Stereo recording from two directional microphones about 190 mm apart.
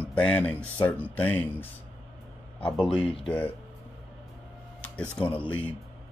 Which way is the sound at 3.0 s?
30° left (ahead or behind).